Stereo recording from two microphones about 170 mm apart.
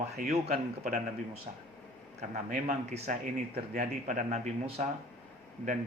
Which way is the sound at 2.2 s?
45° right (ahead or behind).